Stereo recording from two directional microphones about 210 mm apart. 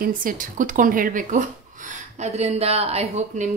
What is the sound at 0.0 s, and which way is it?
A woman's voice, 40° right (ahead or behind).